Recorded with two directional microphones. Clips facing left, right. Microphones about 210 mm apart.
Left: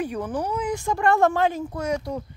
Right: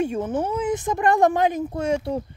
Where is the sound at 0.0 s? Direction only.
25° right (ahead or behind).